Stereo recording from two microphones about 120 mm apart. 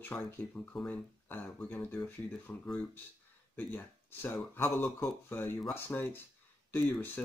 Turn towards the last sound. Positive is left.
turn(degrees=15)  # may be behind; listen again after turning